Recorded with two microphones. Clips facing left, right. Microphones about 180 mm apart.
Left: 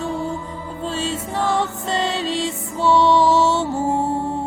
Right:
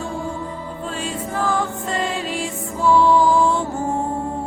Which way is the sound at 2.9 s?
80° left.